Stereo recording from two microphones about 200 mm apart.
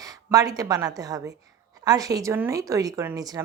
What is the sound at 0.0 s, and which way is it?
A woman's voice, 15° right (ahead or behind).